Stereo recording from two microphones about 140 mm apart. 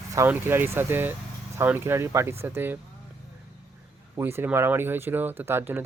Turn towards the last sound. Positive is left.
turn(degrees=-15)  # may be behind; listen again after turning